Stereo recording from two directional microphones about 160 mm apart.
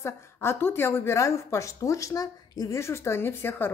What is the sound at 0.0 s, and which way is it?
A woman's voice, 15° left (ahead or behind).